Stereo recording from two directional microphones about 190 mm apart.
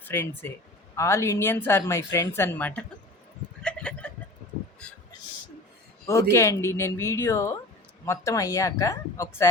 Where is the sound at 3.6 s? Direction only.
5° left (ahead or behind).